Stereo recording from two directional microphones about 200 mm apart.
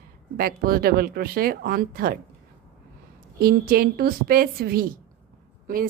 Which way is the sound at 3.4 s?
45° right (ahead or behind).